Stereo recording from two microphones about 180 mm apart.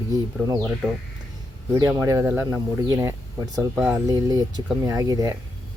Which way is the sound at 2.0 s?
15° right (ahead or behind).